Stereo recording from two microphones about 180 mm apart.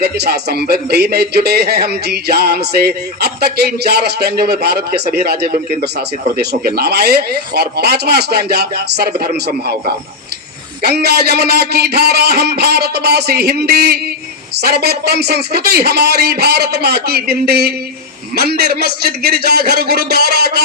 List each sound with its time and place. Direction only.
0.0 s a man's voice: 65° right (ahead or behind)